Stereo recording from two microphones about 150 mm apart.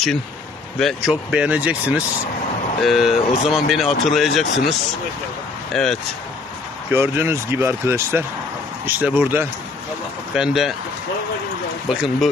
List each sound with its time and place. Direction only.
0.8 s speech: centre (ahead or behind)
5.7 s speech: 5° left (ahead or behind)
6.9 s speech: 15° right (ahead or behind)
11.9 s speech: centre (ahead or behind)